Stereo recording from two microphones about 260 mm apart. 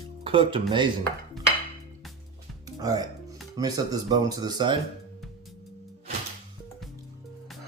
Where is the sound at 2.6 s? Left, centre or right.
Centre.